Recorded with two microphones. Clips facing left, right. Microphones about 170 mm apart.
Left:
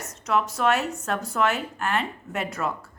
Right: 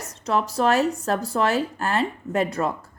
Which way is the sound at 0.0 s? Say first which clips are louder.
Right 1 dB; 35° right (ahead or behind).